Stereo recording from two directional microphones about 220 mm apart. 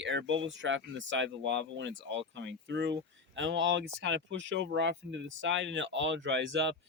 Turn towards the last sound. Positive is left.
turn(degrees=-55)  # may be behind; listen again after turning